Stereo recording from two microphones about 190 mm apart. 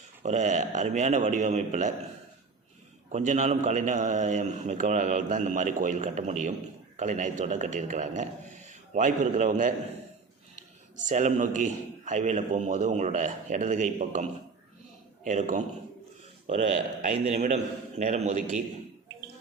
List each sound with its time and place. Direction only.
0.2 s a man's voice: 40° right (ahead or behind)
3.1 s a man's voice: 40° right (ahead or behind)
10.9 s a man's voice: 40° right (ahead or behind)